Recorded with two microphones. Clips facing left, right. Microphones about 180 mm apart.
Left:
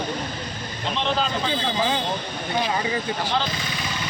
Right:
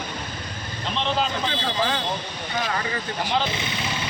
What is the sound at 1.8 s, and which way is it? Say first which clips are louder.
Speech: left 1 dB; 20° left (ahead or behind).